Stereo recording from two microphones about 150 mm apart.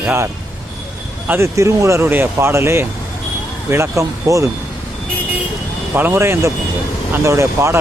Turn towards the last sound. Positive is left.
turn(degrees=-20)  # may be behind; listen again after turning